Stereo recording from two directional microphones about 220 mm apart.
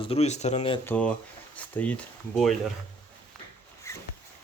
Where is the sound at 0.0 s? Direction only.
25° left (ahead or behind).